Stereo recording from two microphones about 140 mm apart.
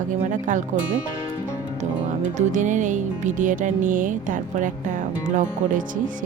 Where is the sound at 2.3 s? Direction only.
60° right (ahead or behind).